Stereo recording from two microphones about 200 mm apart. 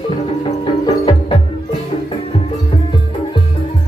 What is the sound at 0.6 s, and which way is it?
Music, 25° left (ahead or behind).